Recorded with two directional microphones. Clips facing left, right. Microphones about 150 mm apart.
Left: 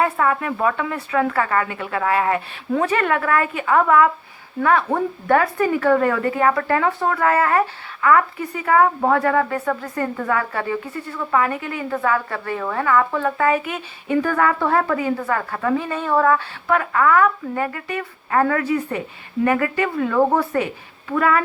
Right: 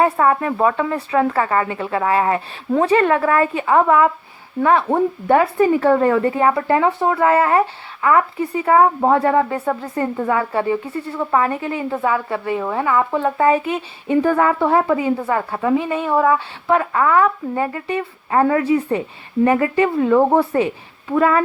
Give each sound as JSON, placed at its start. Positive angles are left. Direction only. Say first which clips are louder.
{"t": 0.0, "sound": "speech", "louder": "right 4 dB", "side_deg": -30}
{"t": 16.6, "sound": "speech", "louder": "right 1 dB", "side_deg": -25}